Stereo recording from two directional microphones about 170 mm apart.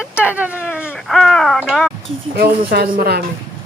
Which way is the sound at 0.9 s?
Centre (ahead or behind).